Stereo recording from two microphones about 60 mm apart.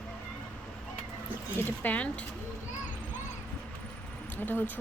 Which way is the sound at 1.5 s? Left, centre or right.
Left.